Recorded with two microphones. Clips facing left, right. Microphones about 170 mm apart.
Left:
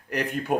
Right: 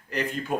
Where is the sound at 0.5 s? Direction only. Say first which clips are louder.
Left 4 dB; 65° left (ahead or behind).